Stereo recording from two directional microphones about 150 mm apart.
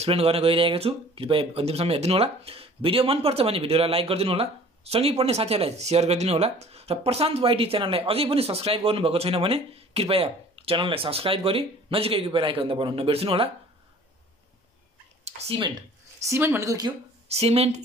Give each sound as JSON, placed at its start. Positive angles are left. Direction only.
{"t": 0.0, "sound": "speech", "side_deg": -40}
{"t": 15.2, "sound": "speech", "side_deg": -40}
{"t": 16.3, "sound": "speech", "side_deg": -15}
{"t": 17.3, "sound": "speech", "side_deg": -45}